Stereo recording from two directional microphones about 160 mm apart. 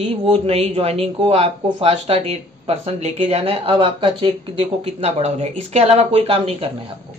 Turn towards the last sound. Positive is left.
turn(degrees=-35)  # may be behind; listen again after turning